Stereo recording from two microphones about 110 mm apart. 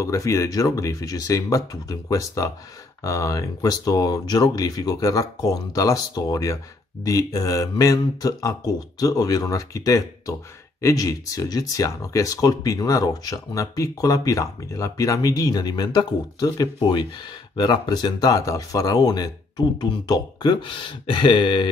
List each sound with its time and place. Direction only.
0.0 s speech: 30° left (ahead or behind); by 21.6 s 45° left (ahead or behind)